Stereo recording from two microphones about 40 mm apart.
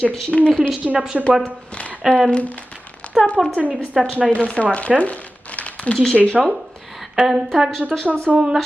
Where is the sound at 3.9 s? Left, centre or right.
Centre.